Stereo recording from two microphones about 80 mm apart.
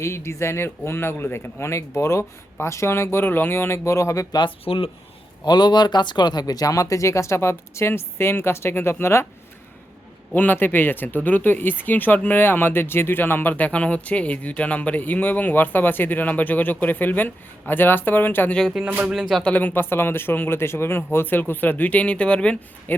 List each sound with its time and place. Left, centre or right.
0.0 s speech: left
4.4 s speech: left
5.5 s speech: left
10.3 s speech: left
18.7 s speech: centre
19.4 s speech: centre
22.9 s speech: left